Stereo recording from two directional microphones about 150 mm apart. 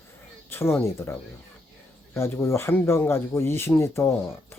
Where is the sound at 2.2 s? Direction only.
20° left (ahead or behind).